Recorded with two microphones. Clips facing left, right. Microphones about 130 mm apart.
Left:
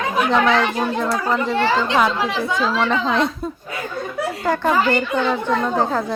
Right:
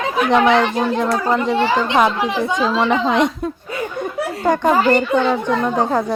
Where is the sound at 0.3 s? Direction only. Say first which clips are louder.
Right 4 dB; 20° right (ahead or behind).